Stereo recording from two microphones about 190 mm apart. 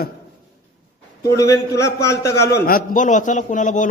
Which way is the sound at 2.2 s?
60° left (ahead or behind).